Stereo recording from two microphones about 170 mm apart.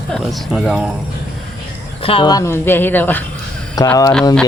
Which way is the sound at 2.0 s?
30° left (ahead or behind).